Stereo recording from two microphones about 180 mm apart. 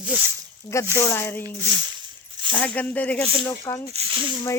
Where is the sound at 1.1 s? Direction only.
15° left (ahead or behind).